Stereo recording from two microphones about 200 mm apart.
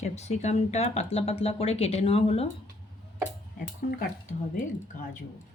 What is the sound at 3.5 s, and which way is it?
Speech, 45° left (ahead or behind).